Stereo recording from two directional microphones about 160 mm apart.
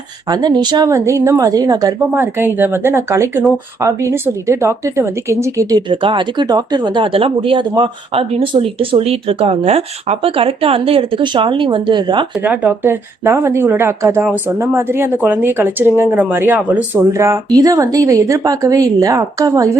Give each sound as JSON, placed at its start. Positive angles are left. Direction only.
{"t": 0.3, "sound": "a woman's voice", "side_deg": -25}
{"t": 12.4, "sound": "speech", "side_deg": -10}